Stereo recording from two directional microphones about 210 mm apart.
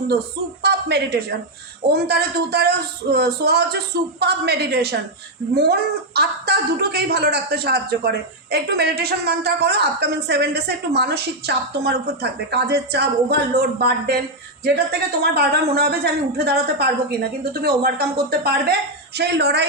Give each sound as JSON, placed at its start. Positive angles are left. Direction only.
{"t": 0.6, "sound": "a man's voice", "side_deg": -50}
{"t": 6.1, "sound": "a man's voice", "side_deg": -50}